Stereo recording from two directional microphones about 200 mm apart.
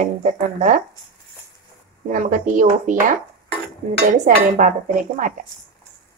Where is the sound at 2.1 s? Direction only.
40° right (ahead or behind).